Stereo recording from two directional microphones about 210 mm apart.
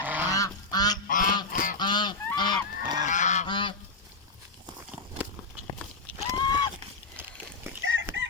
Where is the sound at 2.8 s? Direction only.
20° right (ahead or behind).